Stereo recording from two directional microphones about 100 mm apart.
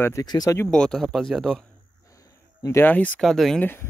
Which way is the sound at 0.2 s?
40° left (ahead or behind).